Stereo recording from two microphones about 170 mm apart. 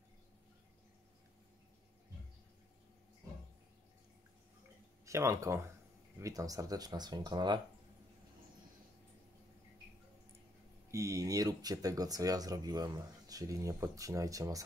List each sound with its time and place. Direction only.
5.0 s speech: 15° right (ahead or behind)
10.9 s speech: 20° right (ahead or behind)